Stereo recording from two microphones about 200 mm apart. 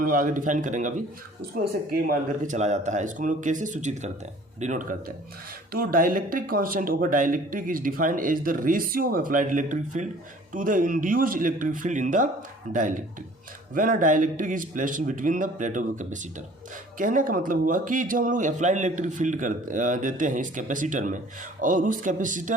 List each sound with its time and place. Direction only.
0.0 s a man's voice: 45° right (ahead or behind)